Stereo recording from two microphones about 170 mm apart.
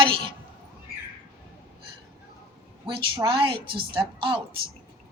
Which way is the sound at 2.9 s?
30° right (ahead or behind).